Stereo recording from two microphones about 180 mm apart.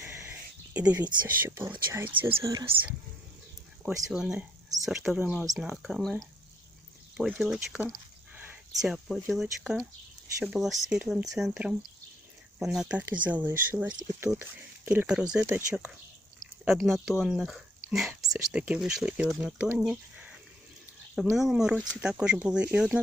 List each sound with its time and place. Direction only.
0.0 s a sound: 15° right (ahead or behind)
1.9 s speech: 10° right (ahead or behind)
4.1 s speech: 5° right (ahead or behind)